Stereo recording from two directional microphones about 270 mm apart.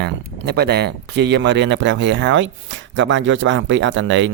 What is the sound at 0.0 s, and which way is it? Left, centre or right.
Speech, right.